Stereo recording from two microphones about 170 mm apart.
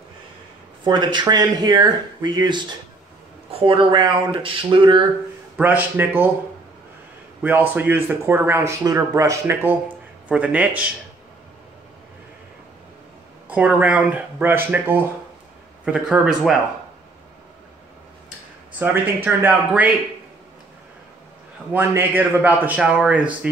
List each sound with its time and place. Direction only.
0.8 s speech: 25° right (ahead or behind)
5.6 s speech: 10° right (ahead or behind)
7.4 s speech: 10° right (ahead or behind)
13.5 s speech: 10° right (ahead or behind)
18.8 s speech: 10° right (ahead or behind)
21.7 s speech: 10° right (ahead or behind)